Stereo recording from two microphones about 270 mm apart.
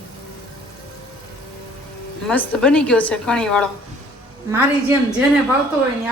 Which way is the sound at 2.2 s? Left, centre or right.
Centre.